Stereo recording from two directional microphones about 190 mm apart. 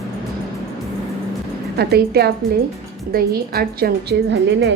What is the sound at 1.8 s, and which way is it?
A woman's voice, 55° right (ahead or behind).